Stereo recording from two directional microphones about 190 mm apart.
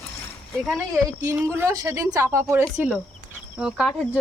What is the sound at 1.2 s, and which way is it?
Speech, 15° right (ahead or behind).